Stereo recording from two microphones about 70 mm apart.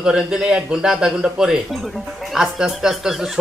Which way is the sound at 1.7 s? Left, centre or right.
Centre.